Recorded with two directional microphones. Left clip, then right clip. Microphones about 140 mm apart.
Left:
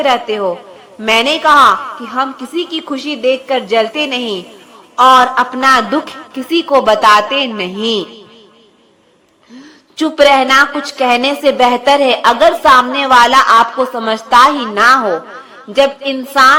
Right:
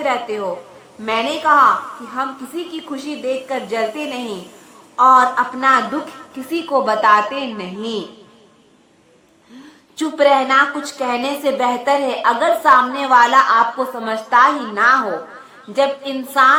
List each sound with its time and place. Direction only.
0.0 s a man's voice: 30° left (ahead or behind)
4.9 s a man's voice: 35° left (ahead or behind)
6.5 s a woman's voice: 25° left (ahead or behind)
10.0 s a woman's voice: 25° left (ahead or behind)